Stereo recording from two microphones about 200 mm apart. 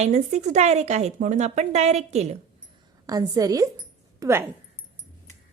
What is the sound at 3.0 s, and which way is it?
A woman's voice, 20° right (ahead or behind).